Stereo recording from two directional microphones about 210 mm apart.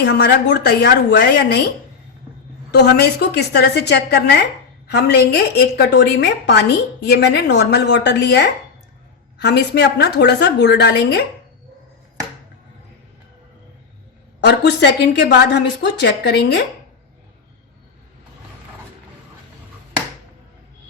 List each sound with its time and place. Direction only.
0.0 s a woman's voice: 50° left (ahead or behind)
2.7 s a woman's voice: 50° left (ahead or behind)
14.4 s a woman's voice: 55° left (ahead or behind)